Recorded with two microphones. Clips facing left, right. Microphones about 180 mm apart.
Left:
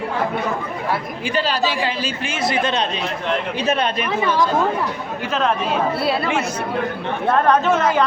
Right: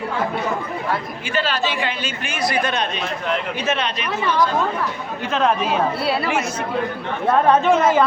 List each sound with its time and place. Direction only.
1.4 s speech: 35° left (ahead or behind)
5.3 s a woman's voice: centre (ahead or behind)
7.3 s a woman's voice: 5° right (ahead or behind)